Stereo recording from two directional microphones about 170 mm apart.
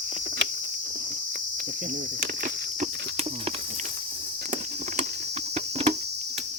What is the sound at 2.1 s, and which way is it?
Insect, 55° right (ahead or behind).